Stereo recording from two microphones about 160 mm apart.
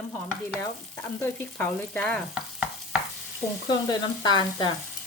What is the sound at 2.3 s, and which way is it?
Stir, 5° right (ahead or behind).